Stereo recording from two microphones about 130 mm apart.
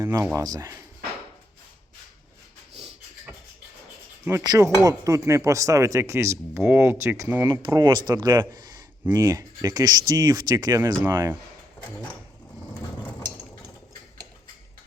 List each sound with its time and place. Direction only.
0.0 s speech: 20° right (ahead or behind)
4.3 s speech: 25° right (ahead or behind)
7.7 s speech: 35° right (ahead or behind)